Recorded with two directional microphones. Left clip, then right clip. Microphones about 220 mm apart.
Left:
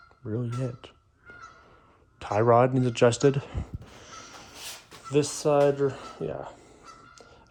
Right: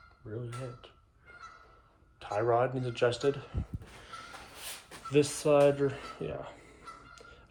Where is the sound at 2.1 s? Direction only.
30° left (ahead or behind).